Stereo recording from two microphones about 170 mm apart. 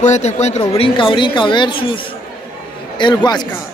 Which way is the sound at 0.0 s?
40° left (ahead or behind).